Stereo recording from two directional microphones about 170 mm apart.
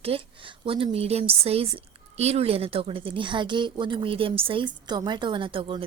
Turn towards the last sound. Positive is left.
turn(degrees=-30)  # may be behind; listen again after turning